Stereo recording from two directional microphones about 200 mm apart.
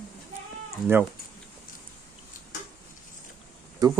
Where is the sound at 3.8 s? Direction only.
20° right (ahead or behind).